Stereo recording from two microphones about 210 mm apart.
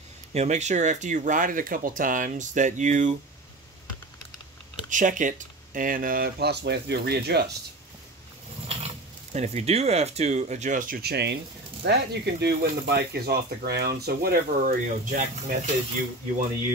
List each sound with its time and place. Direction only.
0.3 s speech: 35° right (ahead or behind)
4.9 s speech: 40° right (ahead or behind)
8.6 s speech: 30° right (ahead or behind)